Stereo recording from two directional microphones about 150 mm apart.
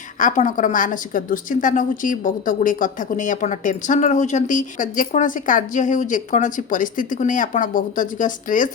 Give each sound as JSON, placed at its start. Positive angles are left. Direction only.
{"t": 0.2, "sound": "a woman's voice", "side_deg": 55}